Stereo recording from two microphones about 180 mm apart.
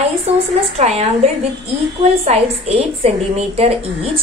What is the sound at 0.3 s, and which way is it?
A woman's voice, 35° right (ahead or behind).